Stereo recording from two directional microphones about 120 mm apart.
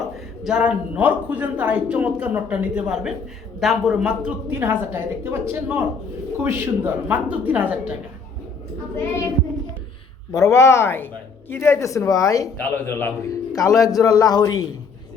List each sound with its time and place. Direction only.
0.4 s speech: 10° right (ahead or behind)
4.4 s a woman's voice: 20° right (ahead or behind)
10.3 s speech: 25° left (ahead or behind)
12.5 s speech: 15° left (ahead or behind); by 14.6 s 35° left (ahead or behind)